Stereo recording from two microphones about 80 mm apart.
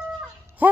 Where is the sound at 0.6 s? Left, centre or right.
Right.